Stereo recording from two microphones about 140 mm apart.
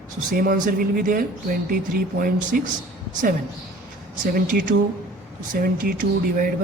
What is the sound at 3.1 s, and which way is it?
A woman's voice, 70° right (ahead or behind).